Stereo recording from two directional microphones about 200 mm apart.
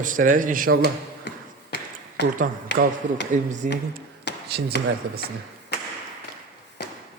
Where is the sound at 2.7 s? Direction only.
60° left (ahead or behind).